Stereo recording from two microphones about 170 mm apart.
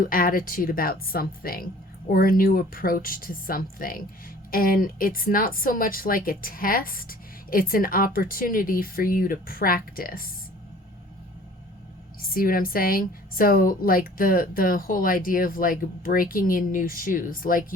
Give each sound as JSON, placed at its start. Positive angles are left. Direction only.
{"t": 0.0, "sound": "speech", "side_deg": 55}
{"t": 12.2, "sound": "speech", "side_deg": 60}